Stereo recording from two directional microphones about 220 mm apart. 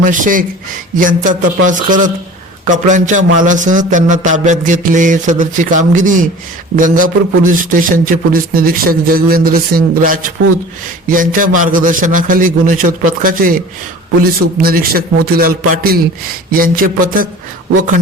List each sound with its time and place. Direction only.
0.0 s a man's voice: 35° right (ahead or behind)
14.6 s a man's voice: 40° right (ahead or behind)